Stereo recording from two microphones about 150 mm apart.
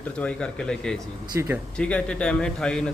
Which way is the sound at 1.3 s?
15° right (ahead or behind).